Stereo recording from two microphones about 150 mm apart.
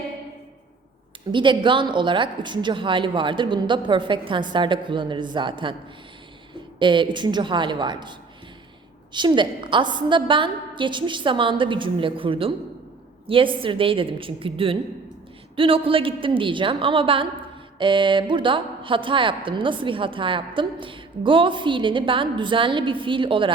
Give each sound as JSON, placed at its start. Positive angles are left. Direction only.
{"t": 1.3, "sound": "speech", "side_deg": -35}
{"t": 6.7, "sound": "speech", "side_deg": -35}
{"t": 9.1, "sound": "a woman's voice", "side_deg": -30}